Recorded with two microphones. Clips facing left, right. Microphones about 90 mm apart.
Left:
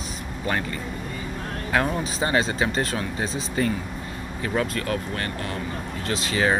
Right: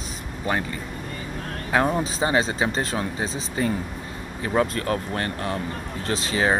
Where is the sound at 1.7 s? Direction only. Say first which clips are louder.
Right 3 dB; 25° right (ahead or behind).